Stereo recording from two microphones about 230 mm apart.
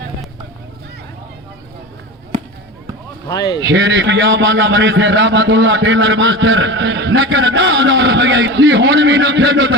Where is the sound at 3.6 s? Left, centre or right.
Right.